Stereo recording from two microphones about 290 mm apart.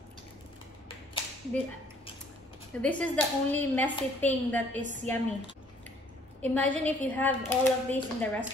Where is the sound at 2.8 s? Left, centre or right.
Centre.